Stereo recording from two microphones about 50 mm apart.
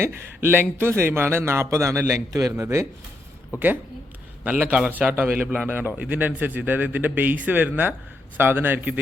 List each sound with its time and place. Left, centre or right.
0.0 s a man's voice: right
3.5 s a man's voice: right